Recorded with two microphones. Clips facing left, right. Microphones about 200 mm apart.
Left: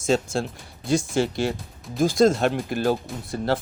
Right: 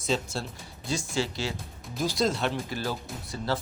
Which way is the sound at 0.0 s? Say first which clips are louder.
Left 7 dB; 50° left (ahead or behind).